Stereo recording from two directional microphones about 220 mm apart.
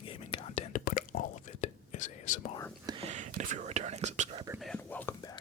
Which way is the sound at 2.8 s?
25° right (ahead or behind).